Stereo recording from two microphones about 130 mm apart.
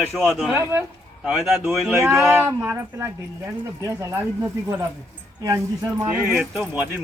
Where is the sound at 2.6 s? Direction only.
15° right (ahead or behind).